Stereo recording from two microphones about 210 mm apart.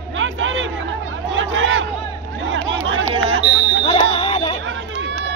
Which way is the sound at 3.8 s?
25° left (ahead or behind).